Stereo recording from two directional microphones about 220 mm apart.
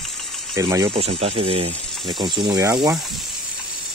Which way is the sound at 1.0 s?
25° right (ahead or behind).